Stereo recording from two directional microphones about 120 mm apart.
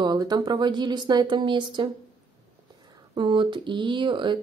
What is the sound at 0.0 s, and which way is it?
Speech, 35° right (ahead or behind).